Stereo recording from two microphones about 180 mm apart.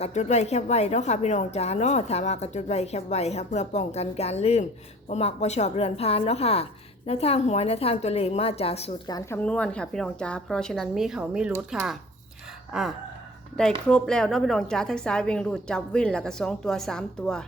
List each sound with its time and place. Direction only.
0.0 s a woman's voice: 40° left (ahead or behind)
9.0 s speech: 20° left (ahead or behind)
9.4 s a woman's voice: 5° left (ahead or behind)